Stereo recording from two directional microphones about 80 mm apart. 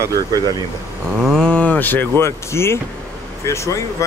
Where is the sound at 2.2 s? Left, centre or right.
Left.